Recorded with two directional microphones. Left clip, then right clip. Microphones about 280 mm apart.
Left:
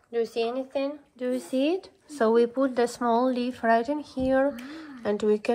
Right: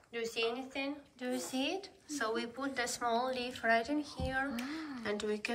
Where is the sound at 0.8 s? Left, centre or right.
Centre.